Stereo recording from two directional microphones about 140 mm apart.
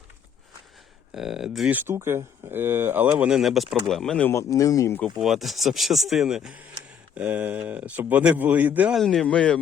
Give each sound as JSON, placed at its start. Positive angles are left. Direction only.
{"t": 1.1, "sound": "speech", "side_deg": -5}
{"t": 1.9, "sound": "speech", "side_deg": -20}
{"t": 4.3, "sound": "speech", "side_deg": 20}
{"t": 5.2, "sound": "speech", "side_deg": 0}
{"t": 9.0, "sound": "speech", "side_deg": 0}